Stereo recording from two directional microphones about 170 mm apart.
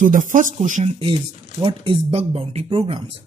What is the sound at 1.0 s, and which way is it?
A man's voice, 30° right (ahead or behind).